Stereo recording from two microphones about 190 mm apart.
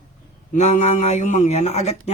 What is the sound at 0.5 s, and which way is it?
A man's voice, 35° left (ahead or behind).